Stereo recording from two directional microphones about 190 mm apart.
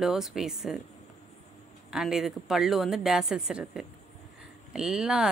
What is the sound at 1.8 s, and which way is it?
Speech, centre (ahead or behind).